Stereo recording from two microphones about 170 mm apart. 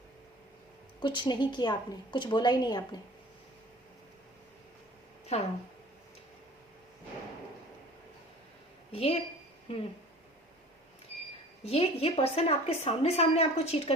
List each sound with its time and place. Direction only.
0.9 s a woman's voice: 25° left (ahead or behind)
5.3 s a woman's voice: 40° left (ahead or behind)
8.9 s a woman's voice: 35° left (ahead or behind)
11.6 s a woman's voice: 35° left (ahead or behind)